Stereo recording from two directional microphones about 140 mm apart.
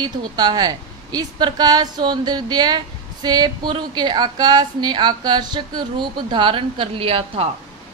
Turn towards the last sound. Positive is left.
turn(degrees=-40)  # may be behind; listen again after turning